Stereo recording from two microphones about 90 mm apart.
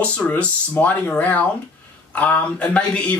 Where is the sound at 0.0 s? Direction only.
15° left (ahead or behind).